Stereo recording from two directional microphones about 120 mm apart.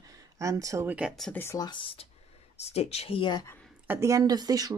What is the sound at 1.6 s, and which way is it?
Speech, 40° left (ahead or behind).